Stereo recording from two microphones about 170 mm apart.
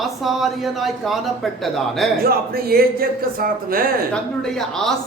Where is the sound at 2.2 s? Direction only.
60° right (ahead or behind).